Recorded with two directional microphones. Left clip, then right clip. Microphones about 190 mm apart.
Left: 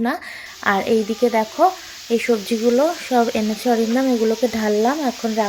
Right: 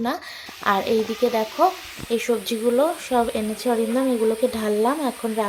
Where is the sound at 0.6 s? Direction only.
15° left (ahead or behind).